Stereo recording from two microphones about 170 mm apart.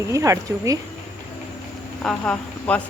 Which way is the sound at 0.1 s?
15° right (ahead or behind).